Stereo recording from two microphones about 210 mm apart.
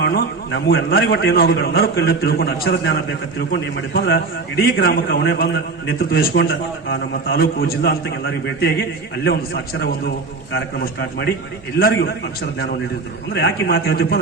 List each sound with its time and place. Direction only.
0.0 s a man's voice: 45° left (ahead or behind)
10.5 s a man's voice: 50° left (ahead or behind)
13.3 s a man's voice: 50° left (ahead or behind)